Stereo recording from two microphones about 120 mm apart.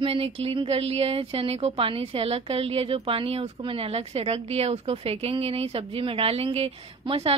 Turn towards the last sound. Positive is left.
turn(degrees=-55)  # may be behind; listen again after turning